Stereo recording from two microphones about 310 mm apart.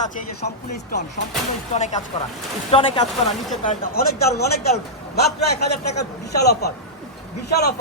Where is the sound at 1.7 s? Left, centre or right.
Left.